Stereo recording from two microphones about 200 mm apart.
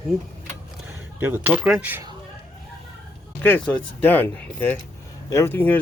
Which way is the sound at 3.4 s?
10° left (ahead or behind).